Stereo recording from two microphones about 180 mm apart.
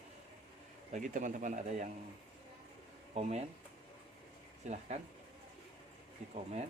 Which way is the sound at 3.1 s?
40° right (ahead or behind).